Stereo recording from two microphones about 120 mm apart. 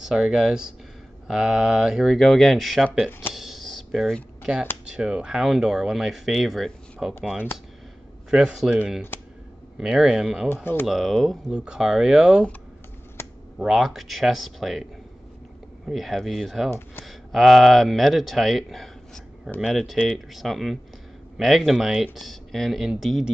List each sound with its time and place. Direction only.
0.0 s speech: 5° right (ahead or behind)
3.3 s computer keyboard: centre (ahead or behind)
4.8 s speech: 5° right (ahead or behind)
8.3 s speech: 5° right (ahead or behind)
10.5 s speech: 15° left (ahead or behind)
10.9 s speech: centre (ahead or behind)
13.6 s speech: 5° right (ahead or behind)